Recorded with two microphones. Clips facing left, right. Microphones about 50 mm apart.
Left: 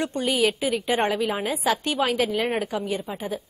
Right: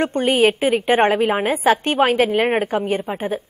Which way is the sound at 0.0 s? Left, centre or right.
Right.